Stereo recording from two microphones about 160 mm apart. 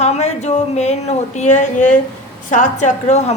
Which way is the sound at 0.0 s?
45° left (ahead or behind).